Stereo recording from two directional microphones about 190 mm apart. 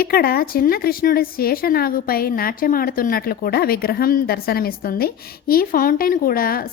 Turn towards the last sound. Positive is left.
turn(degrees=50)  # may be behind; listen again after turning